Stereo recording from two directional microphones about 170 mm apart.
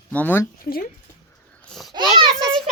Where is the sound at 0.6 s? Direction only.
60° left (ahead or behind).